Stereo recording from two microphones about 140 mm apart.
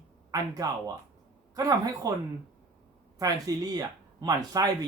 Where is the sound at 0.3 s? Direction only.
25° right (ahead or behind).